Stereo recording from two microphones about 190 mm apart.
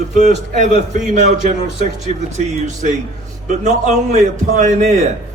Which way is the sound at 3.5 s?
40° right (ahead or behind).